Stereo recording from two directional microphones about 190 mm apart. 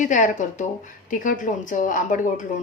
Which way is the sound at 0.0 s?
40° left (ahead or behind).